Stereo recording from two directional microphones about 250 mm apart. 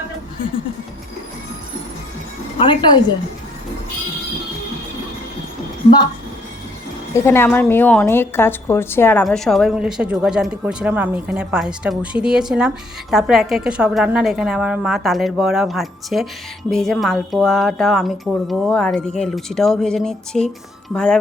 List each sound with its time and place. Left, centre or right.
2.6 s a woman's voice: centre
7.1 s a woman's voice: centre